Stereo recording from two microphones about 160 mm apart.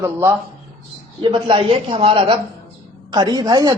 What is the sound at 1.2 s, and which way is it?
A man's voice, 30° right (ahead or behind).